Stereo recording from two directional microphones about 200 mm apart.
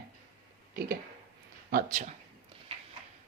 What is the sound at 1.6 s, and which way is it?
Speech, 45° right (ahead or behind).